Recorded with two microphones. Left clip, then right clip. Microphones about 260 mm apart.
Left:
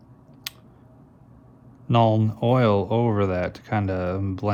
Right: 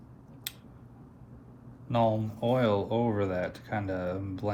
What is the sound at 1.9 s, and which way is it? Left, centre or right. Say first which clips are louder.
Speech: left 7 dB; left.